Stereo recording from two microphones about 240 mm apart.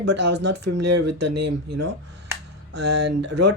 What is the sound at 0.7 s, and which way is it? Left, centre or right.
Speech, right.